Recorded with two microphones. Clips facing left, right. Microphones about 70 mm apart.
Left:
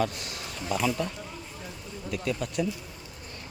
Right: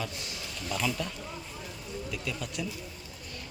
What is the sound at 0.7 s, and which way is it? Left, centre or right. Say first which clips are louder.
Speech: left 4 dB; left.